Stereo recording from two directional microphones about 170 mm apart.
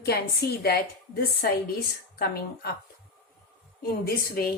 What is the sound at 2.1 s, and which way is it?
Speech, 65° left (ahead or behind).